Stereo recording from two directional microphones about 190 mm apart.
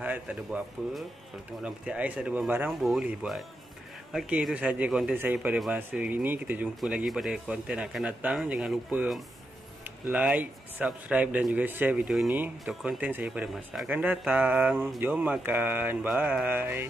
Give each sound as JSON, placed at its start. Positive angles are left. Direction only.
{"t": 0.0, "sound": "a man's voice", "side_deg": -5}